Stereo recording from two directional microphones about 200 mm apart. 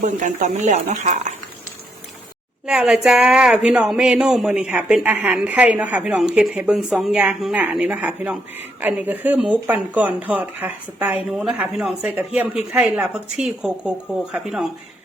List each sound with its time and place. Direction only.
0.0 s speech: 40° right (ahead or behind)
2.6 s speech: 5° right (ahead or behind)